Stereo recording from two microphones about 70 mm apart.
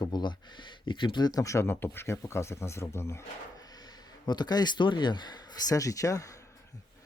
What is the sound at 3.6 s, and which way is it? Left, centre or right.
Speech, left.